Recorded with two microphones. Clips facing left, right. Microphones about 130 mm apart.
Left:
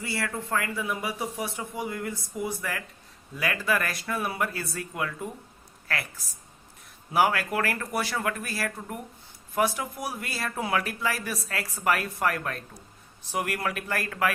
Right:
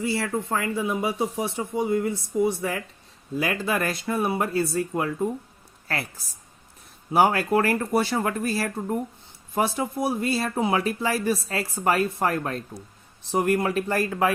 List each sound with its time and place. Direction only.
0.0 s speech: 25° right (ahead or behind)
7.1 s speech: 30° right (ahead or behind)